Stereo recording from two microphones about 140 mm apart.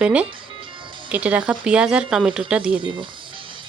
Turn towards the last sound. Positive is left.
turn(degrees=-35)  # may be behind; listen again after turning